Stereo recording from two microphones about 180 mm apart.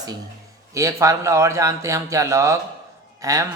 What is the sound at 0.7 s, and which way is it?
Speech, 15° right (ahead or behind).